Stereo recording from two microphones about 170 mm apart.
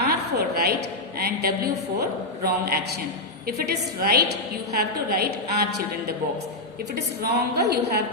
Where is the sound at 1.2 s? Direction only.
65° right (ahead or behind).